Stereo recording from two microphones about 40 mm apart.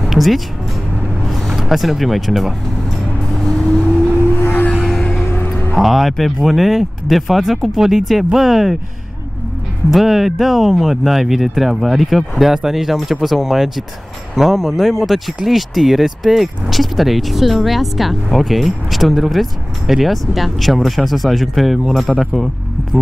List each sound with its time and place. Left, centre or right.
0.0 s music: centre
1.3 s speech: centre
4.7 s a sound: centre
5.2 s music: left
5.8 s speech: centre
9.9 s speech: centre